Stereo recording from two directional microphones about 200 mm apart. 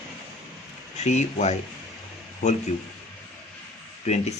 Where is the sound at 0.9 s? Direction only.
35° left (ahead or behind).